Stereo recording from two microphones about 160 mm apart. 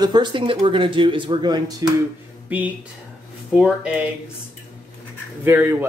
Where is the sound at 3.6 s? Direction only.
5° right (ahead or behind).